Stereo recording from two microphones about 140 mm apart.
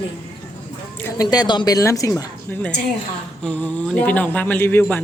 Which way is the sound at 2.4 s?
10° left (ahead or behind).